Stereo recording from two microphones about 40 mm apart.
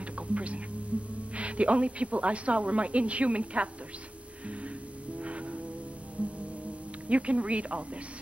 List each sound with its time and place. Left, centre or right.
0.3 s hum: right
0.9 s a sound: right
1.3 s a woman's voice: right
5.2 s music: right
7.1 s a woman's voice: right